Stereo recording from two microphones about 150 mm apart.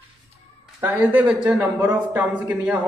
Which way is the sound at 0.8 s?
10° right (ahead or behind).